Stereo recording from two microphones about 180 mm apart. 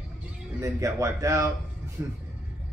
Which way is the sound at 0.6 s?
15° right (ahead or behind).